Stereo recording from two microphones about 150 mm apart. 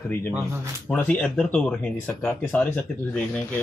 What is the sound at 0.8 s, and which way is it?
Speech, 10° left (ahead or behind).